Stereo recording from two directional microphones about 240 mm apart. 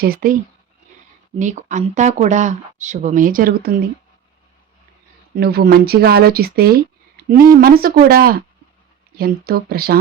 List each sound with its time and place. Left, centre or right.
0.0 s speech: right
1.4 s speech: right
5.4 s speech: right